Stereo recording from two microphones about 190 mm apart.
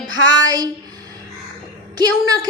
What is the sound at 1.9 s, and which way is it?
Speech, 20° right (ahead or behind).